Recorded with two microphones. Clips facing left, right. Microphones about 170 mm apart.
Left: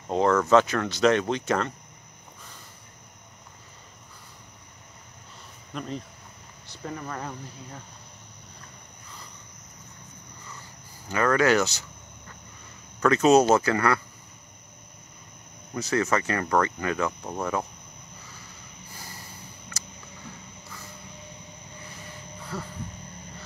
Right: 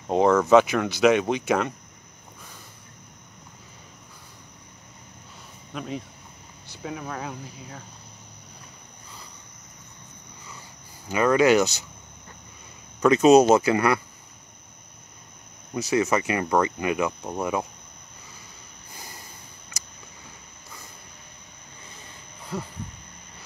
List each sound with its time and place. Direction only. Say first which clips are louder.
0.1 s speech: right 3 dB; 15° right (ahead or behind)
5.8 s speech: right 1 dB; 5° right (ahead or behind)
11.1 s speech: right 3 dB; 15° right (ahead or behind)
13.0 s speech: right 3 dB; 15° right (ahead or behind)
15.7 s speech: right 2 dB; 10° right (ahead or behind)
22.5 s speech: right 3 dB; 15° right (ahead or behind)